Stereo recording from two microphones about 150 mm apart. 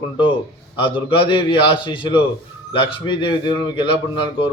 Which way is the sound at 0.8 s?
35° left (ahead or behind).